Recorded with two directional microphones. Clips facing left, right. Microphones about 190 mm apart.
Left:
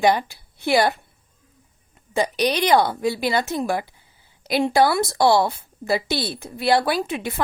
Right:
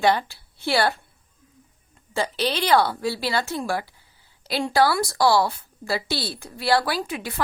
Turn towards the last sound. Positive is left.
turn(degrees=20)  # may be behind; listen again after turning